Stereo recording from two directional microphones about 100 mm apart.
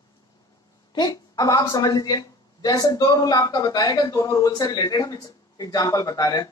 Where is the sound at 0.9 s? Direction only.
40° left (ahead or behind).